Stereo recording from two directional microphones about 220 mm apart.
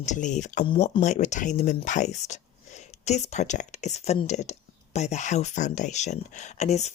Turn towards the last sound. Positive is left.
turn(degrees=30)  # may be behind; listen again after turning